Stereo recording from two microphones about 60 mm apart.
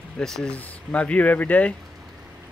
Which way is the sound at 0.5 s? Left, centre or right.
Left.